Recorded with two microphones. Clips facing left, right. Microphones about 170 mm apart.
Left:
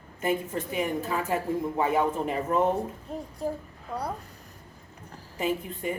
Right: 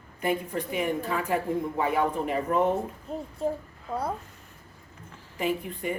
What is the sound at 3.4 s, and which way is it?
Speech, centre (ahead or behind).